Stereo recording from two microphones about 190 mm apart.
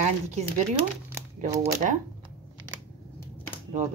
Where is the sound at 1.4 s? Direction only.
45° right (ahead or behind).